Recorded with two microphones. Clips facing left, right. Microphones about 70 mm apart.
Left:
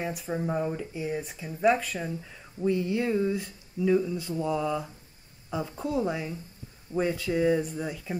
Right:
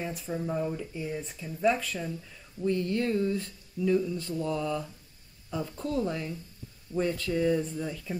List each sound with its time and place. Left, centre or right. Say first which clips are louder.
0.0 s speech: left 3 dB; centre
0.3 s speech: left 2 dB; left
2.0 s speech: left 2 dB; left